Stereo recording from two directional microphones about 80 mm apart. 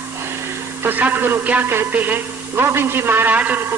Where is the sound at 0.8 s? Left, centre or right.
Right.